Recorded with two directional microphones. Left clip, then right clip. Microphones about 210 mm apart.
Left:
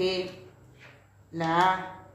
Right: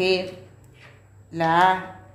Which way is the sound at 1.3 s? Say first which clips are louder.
Right 6 dB; 50° right (ahead or behind).